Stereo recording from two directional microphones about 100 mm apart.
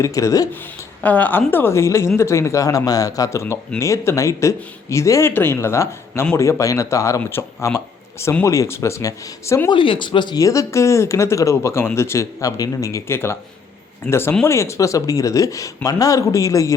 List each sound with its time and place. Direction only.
0.0 s speech: 35° left (ahead or behind)
1.0 s speech: 15° left (ahead or behind); by 9.6 s 35° left (ahead or behind)
9.6 s speech: 60° left (ahead or behind)
10.4 s speech: 30° left (ahead or behind)